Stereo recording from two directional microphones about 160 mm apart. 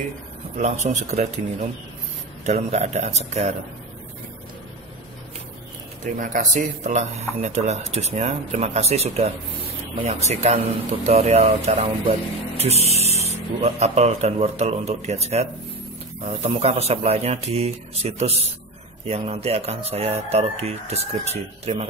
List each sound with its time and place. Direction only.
0.6 s speech: 45° right (ahead or behind)
6.1 s speech: 55° right (ahead or behind)
16.4 s speech: 40° right (ahead or behind)